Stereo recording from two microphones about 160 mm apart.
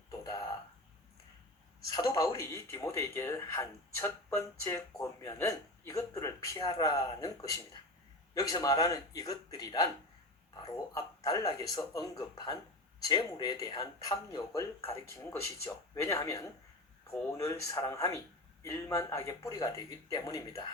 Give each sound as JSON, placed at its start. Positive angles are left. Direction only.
{"t": 1.9, "sound": "speech", "side_deg": 25}